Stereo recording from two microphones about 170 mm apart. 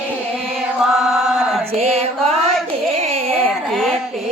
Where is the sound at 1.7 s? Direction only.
40° right (ahead or behind).